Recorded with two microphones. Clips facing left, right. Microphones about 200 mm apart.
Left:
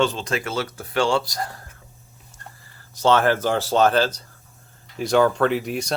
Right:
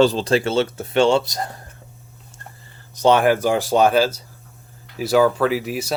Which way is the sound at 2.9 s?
15° right (ahead or behind).